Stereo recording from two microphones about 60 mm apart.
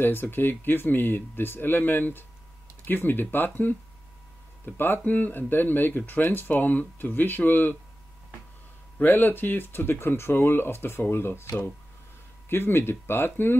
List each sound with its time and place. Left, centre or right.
0.0 s speech: left
8.9 s speech: left
12.4 s speech: left